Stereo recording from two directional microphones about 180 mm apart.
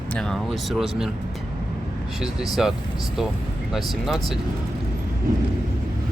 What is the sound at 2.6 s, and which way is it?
Speech, centre (ahead or behind).